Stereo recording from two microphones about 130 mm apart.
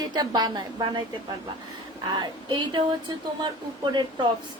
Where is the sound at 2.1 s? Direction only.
35° right (ahead or behind).